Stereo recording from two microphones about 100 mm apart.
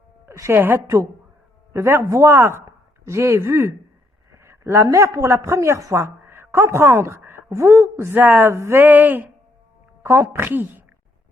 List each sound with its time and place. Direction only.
0.3 s a man's voice: 25° right (ahead or behind)